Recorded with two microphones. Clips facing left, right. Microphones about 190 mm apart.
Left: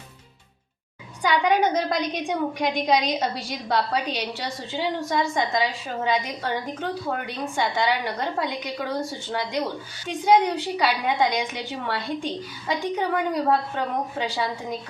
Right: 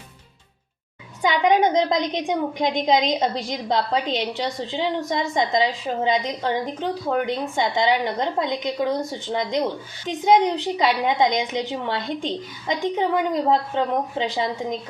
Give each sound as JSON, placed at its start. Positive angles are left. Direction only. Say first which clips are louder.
{"t": 1.2, "sound": "a woman's voice", "louder": "right 3 dB", "side_deg": -20}